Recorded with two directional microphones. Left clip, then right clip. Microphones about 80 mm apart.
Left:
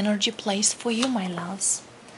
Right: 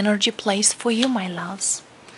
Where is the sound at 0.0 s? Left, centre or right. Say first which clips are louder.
Right 5 dB; right.